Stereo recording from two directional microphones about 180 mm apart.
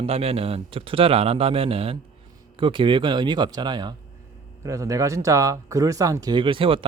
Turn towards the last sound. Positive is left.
turn(degrees=-30)  # may be behind; listen again after turning